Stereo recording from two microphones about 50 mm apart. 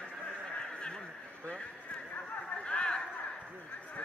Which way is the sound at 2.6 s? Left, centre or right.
Centre.